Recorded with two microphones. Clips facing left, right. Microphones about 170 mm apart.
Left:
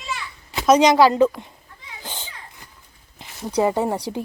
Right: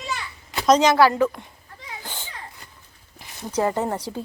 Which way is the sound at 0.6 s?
10° left (ahead or behind).